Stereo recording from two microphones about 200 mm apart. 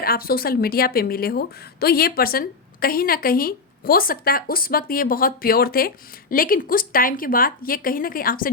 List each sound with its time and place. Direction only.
0.0 s a woman's voice: 50° left (ahead or behind)